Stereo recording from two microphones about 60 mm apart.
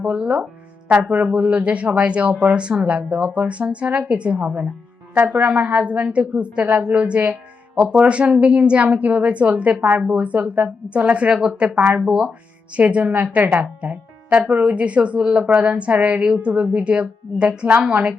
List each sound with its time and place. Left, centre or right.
0.0 s a woman's voice: right